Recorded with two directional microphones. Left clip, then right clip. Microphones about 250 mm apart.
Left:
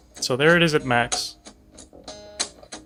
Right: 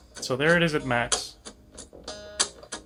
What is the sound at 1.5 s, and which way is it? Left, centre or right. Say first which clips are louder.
Music: right 1 dB; centre.